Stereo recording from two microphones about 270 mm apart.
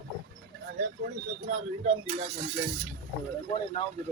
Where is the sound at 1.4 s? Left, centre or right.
Right.